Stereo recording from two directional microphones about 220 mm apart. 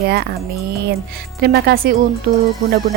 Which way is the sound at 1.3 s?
45° right (ahead or behind).